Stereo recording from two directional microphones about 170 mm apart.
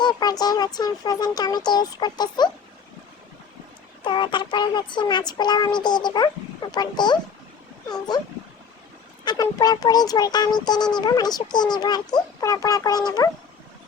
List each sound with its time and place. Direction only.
0.0 s speech: 25° left (ahead or behind)
4.0 s speech: 30° left (ahead or behind)
9.2 s speech: 25° left (ahead or behind)